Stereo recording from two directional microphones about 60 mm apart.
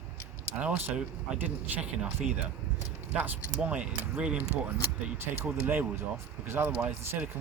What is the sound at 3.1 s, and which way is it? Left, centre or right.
Speech, right.